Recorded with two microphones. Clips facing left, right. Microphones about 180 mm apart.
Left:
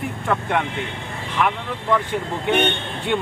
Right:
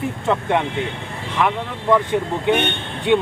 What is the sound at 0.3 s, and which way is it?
Speech, 20° right (ahead or behind).